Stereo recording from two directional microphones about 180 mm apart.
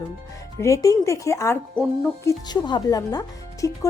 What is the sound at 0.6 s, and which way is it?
Speech, 20° left (ahead or behind).